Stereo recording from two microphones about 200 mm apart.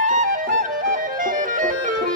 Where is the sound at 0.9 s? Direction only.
40° right (ahead or behind).